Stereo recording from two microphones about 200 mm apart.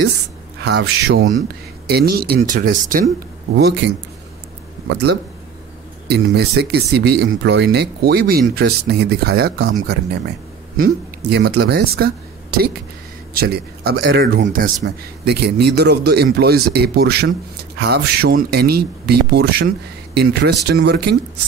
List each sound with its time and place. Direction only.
0.7 s speech: 55° right (ahead or behind)
3.5 s speech: 55° right (ahead or behind)
10.8 s speech: 55° right (ahead or behind)